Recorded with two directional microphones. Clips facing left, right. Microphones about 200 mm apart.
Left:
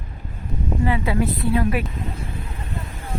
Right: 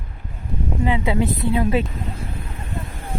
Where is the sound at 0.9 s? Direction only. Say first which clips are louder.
Right 2 dB; 20° right (ahead or behind).